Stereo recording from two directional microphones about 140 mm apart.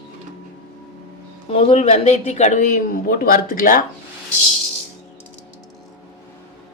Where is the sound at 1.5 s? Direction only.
45° left (ahead or behind); by 3.8 s 90° left.